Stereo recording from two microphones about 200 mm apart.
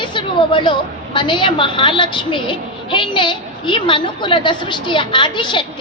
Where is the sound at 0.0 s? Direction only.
25° left (ahead or behind).